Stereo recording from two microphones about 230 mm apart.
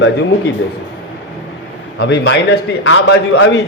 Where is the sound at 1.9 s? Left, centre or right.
Left.